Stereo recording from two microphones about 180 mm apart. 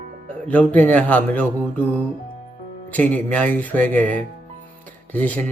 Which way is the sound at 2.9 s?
10° left (ahead or behind).